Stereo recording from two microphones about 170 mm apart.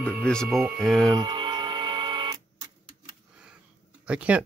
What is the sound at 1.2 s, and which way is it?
Music, 30° right (ahead or behind).